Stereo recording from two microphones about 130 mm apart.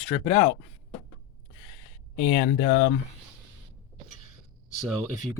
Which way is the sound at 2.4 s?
90° left.